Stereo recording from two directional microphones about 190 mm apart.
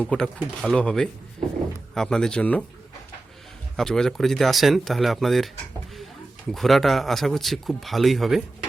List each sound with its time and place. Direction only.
0.0 s speech: 5° left (ahead or behind)
3.8 s speech: 5° left (ahead or behind)
6.5 s speech: centre (ahead or behind)